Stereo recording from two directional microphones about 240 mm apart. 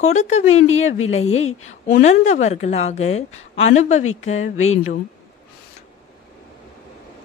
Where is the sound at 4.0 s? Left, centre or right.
Left.